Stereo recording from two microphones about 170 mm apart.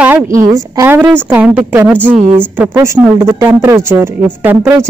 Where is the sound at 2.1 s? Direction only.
45° right (ahead or behind).